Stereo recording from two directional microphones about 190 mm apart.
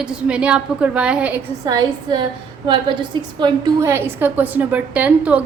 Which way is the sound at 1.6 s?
20° right (ahead or behind).